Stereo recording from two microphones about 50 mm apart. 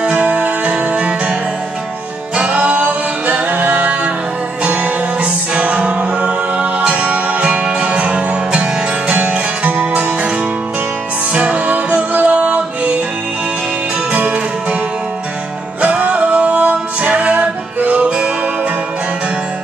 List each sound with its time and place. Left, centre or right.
0.0 s music: right
2.3 s music: right
11.3 s music: right
14.1 s music: right
15.8 s music: right